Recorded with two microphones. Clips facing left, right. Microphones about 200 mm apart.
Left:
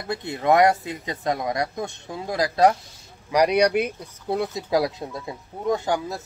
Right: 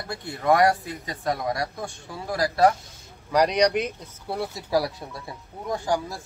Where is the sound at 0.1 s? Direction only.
20° left (ahead or behind).